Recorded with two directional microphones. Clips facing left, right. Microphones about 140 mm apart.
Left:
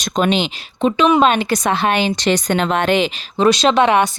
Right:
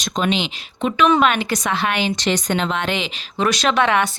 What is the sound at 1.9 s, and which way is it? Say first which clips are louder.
Speech: left 5 dB; 40° left (ahead or behind).